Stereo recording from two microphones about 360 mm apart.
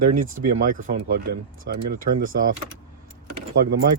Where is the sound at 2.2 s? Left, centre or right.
Right.